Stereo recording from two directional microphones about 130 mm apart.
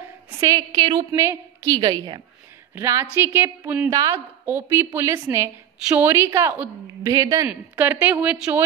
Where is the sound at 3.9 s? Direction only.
30° right (ahead or behind).